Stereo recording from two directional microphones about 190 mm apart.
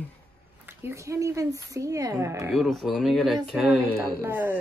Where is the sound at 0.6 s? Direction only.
15° right (ahead or behind).